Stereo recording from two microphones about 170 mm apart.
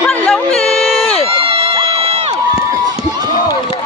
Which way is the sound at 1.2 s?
35° right (ahead or behind).